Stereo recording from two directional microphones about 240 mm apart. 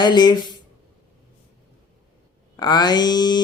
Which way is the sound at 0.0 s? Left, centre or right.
Centre.